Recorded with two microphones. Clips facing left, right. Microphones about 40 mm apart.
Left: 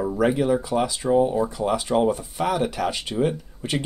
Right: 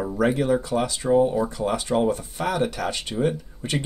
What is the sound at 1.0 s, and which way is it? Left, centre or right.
Speech, centre.